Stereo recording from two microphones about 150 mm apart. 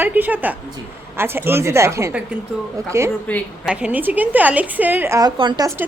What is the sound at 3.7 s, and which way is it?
A woman's voice, 10° right (ahead or behind).